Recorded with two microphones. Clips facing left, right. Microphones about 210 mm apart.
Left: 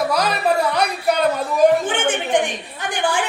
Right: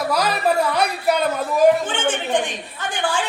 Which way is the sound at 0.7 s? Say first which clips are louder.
Even; centre (ahead or behind).